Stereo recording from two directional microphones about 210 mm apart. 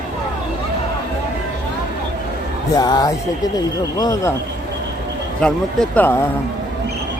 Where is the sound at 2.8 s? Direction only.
20° left (ahead or behind).